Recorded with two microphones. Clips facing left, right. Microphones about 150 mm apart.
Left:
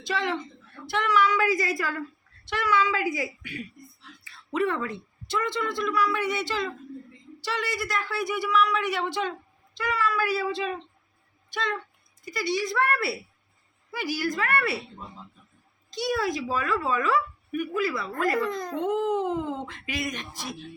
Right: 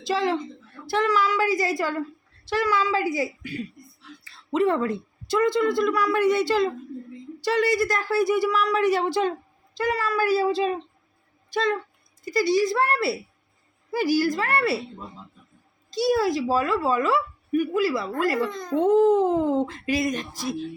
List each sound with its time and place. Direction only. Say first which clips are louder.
0.1 s a woman's voice: right 5 dB; 35° right (ahead or behind)
7.4 s speech: right 9 dB; 45° right (ahead or behind)
16.0 s speech: right 6 dB; 35° right (ahead or behind)
18.5 s speech: right 4 dB; 5° left (ahead or behind)
18.8 s speech: right 9 dB; 35° right (ahead or behind)